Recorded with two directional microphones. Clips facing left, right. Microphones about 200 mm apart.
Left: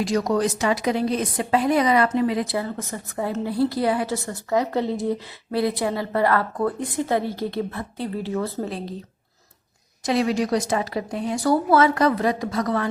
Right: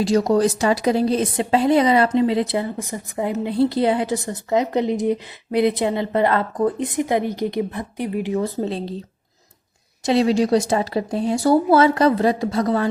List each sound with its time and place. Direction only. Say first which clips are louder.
0.0 s speech: right 4 dB; 30° right (ahead or behind)
10.1 s speech: right 5 dB; 30° right (ahead or behind)